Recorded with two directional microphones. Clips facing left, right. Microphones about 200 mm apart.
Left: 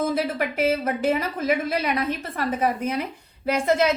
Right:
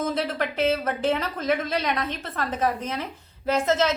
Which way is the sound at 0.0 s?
10° left (ahead or behind).